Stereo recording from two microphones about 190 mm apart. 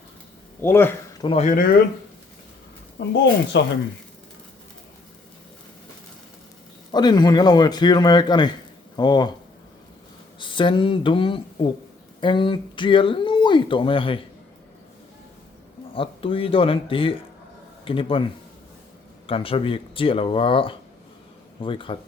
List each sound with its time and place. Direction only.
0.6 s speech: 10° left (ahead or behind)
1.2 s speech: 30° left (ahead or behind); by 1.8 s 50° left (ahead or behind)
3.0 s speech: 60° left (ahead or behind)
6.9 s speech: 20° left (ahead or behind)
10.4 s speech: 25° left (ahead or behind)
16.0 s speech: 30° left (ahead or behind)
19.3 s speech: 30° left (ahead or behind)